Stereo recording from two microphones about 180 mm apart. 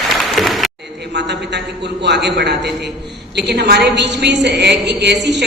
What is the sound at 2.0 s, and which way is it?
A woman's voice, 70° right (ahead or behind).